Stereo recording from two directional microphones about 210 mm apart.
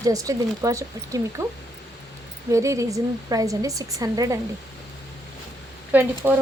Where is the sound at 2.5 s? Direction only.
15° right (ahead or behind).